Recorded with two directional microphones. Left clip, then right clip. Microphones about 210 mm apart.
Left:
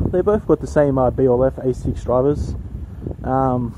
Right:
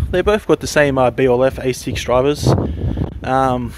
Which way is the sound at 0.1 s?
45° right (ahead or behind).